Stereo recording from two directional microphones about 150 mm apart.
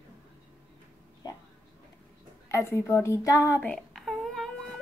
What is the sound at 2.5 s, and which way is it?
A woman's voice, 15° left (ahead or behind).